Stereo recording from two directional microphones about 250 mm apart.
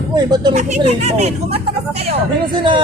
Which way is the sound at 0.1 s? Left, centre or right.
Centre.